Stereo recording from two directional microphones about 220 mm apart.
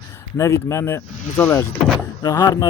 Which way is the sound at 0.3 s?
15° left (ahead or behind).